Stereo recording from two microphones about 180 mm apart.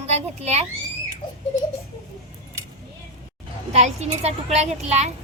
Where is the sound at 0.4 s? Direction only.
35° right (ahead or behind).